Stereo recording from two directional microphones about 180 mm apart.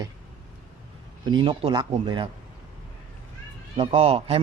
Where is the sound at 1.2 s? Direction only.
25° right (ahead or behind).